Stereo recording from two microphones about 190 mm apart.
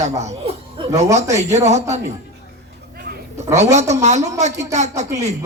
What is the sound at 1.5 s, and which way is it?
Speech, 35° right (ahead or behind).